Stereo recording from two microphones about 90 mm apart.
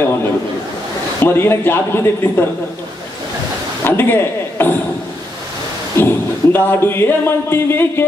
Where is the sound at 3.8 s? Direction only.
25° left (ahead or behind).